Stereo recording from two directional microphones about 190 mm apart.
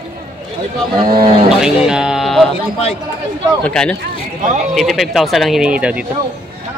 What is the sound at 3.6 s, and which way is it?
Speech, 5° left (ahead or behind).